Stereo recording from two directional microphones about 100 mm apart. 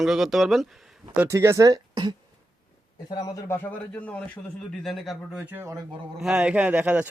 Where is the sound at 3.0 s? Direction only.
45° left (ahead or behind).